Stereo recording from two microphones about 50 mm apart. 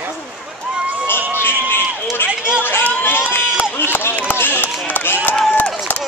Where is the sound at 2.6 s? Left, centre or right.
Left.